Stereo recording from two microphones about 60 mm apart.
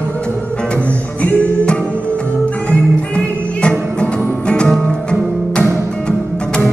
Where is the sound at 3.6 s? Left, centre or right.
Centre.